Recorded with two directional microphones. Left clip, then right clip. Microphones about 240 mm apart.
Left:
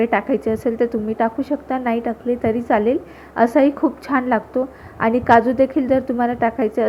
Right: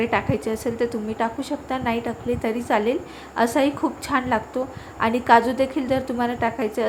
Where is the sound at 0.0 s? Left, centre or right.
Centre.